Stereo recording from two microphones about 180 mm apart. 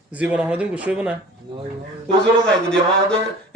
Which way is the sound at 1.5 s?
25° right (ahead or behind).